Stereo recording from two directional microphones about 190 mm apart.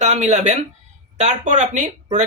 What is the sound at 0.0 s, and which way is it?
Speech, 35° right (ahead or behind).